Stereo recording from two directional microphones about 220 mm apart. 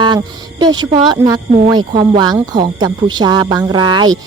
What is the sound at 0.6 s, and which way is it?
Speech, 20° right (ahead or behind).